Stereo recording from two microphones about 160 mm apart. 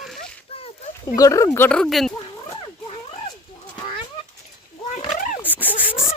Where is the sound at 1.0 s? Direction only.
20° left (ahead or behind); by 2.1 s centre (ahead or behind).